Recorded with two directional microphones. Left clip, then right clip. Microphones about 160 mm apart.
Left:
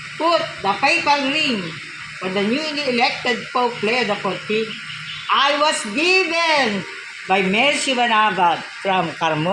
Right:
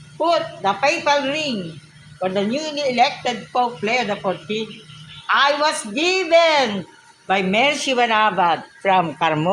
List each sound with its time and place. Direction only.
0.3 s speech: 15° right (ahead or behind)